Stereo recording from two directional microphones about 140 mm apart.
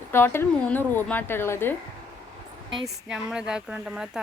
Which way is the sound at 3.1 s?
5° right (ahead or behind).